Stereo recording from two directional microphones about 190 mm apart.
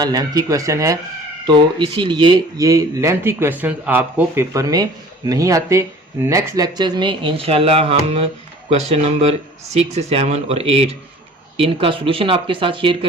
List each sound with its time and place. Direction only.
0.0 s speech: 20° right (ahead or behind)